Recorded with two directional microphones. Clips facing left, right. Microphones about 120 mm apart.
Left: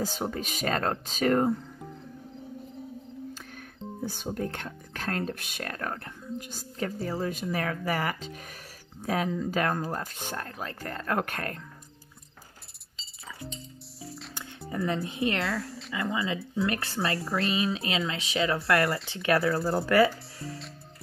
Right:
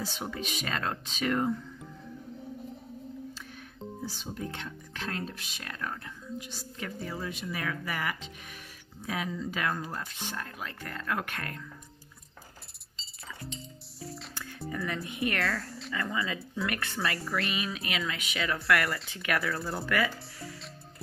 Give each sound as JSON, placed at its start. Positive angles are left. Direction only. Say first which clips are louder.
{"t": 0.0, "sound": "speech", "louder": "left 5 dB", "side_deg": 40}
{"t": 3.3, "sound": "speech", "louder": "left 1 dB", "side_deg": 50}
{"t": 14.0, "sound": "music", "louder": "right 1 dB", "side_deg": 0}
{"t": 14.7, "sound": "speech", "louder": "left 5 dB", "side_deg": 30}
{"t": 15.5, "sound": "speech", "louder": "left 3 dB", "side_deg": 0}
{"t": 15.9, "sound": "speech", "louder": "left 3 dB", "side_deg": 25}